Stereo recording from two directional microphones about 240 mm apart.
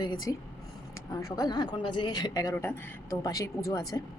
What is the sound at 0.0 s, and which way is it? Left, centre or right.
A woman's voice, centre.